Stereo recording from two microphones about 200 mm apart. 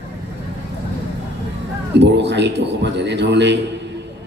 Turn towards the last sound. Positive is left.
turn(degrees=-60)  # may be behind; listen again after turning